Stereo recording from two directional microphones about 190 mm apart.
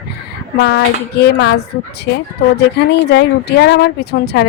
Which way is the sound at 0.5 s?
60° left (ahead or behind).